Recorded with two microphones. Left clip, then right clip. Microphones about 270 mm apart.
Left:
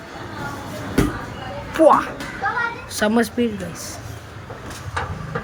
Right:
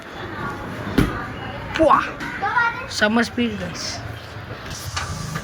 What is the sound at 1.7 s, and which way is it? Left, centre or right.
Speech, centre.